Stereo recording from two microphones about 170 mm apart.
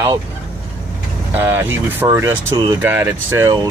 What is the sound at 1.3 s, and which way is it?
Speech, 15° right (ahead or behind).